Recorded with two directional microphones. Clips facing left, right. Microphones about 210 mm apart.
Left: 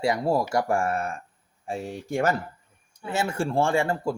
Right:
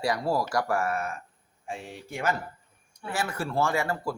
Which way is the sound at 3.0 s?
25° left (ahead or behind).